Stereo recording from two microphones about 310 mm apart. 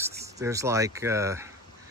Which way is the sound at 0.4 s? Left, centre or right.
Centre.